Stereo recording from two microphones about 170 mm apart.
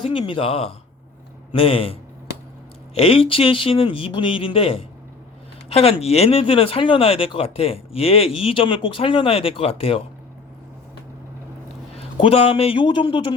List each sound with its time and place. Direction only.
0.0 s speech: 30° left (ahead or behind)
11.9 s speech: 35° left (ahead or behind)